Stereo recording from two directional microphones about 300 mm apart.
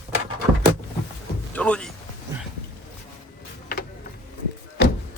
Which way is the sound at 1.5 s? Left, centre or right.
Centre.